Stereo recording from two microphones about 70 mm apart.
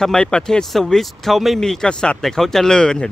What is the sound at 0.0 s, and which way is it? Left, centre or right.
Speech, centre.